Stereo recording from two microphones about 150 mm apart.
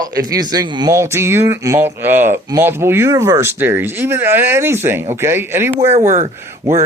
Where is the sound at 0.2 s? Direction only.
25° right (ahead or behind).